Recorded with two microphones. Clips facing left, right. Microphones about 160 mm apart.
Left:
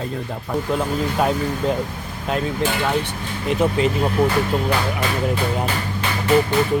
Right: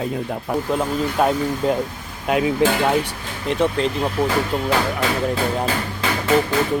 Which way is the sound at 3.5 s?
5° left (ahead or behind).